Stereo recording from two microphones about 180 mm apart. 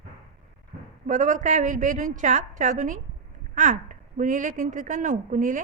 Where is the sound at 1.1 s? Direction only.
45° right (ahead or behind).